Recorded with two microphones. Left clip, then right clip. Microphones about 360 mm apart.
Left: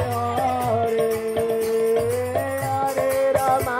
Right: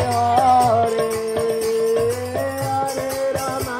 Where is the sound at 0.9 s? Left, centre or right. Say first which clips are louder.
Right 1 dB; centre.